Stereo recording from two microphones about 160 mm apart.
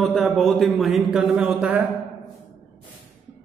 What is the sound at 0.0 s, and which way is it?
A man's voice, centre (ahead or behind).